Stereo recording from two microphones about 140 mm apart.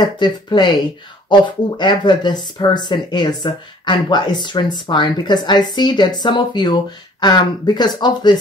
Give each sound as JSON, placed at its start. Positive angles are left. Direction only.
{"t": 0.0, "sound": "speech", "side_deg": 35}